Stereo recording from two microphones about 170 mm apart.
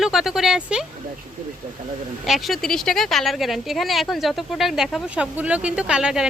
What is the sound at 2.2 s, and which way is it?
Speech, centre (ahead or behind).